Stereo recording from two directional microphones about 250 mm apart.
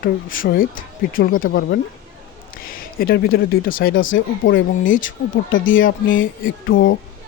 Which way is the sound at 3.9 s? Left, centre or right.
Left.